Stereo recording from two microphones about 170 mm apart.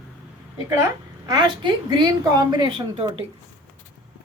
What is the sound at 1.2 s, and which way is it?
A woman's voice, 25° right (ahead or behind).